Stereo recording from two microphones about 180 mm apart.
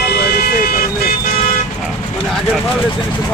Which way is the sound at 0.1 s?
65° left (ahead or behind).